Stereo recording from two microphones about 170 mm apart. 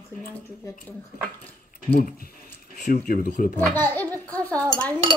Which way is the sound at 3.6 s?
10° left (ahead or behind).